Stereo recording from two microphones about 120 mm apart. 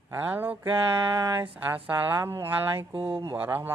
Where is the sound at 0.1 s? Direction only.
15° right (ahead or behind).